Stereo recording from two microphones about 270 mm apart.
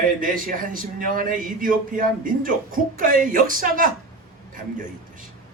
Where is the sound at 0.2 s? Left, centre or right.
Right.